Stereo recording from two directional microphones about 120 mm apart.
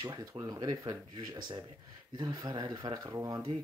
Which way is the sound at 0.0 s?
35° right (ahead or behind).